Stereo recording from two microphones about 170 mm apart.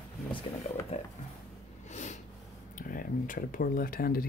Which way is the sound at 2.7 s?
55° left (ahead or behind).